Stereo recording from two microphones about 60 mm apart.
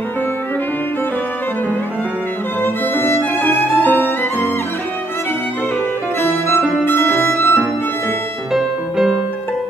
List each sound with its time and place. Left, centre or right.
2.6 s violin: left
6.8 s music: left
7.2 s music: left
8.5 s music: centre